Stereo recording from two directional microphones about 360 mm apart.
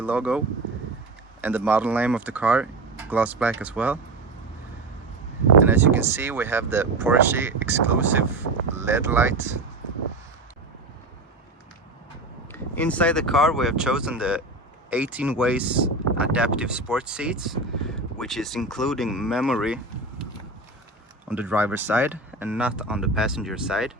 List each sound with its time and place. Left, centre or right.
0.0 s speech: centre
5.6 s speech: centre
12.5 s speech: centre
21.2 s speech: centre